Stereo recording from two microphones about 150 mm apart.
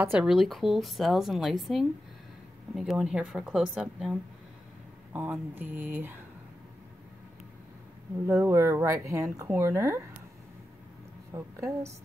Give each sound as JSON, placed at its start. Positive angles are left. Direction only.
{"t": 0.2, "sound": "speech", "side_deg": 0}
{"t": 8.3, "sound": "speech", "side_deg": -20}
{"t": 11.3, "sound": "a woman's voice", "side_deg": -20}